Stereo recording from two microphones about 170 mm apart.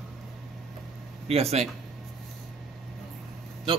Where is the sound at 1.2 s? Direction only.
35° right (ahead or behind).